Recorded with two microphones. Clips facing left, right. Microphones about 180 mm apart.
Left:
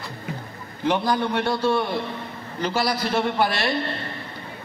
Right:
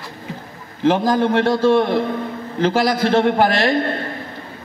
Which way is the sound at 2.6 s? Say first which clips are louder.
Right 7 dB; 90° right.